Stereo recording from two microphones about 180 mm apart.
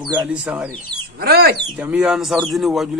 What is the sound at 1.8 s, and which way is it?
Speech, 5° right (ahead or behind).